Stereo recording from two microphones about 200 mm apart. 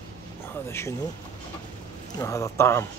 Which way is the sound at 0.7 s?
10° left (ahead or behind).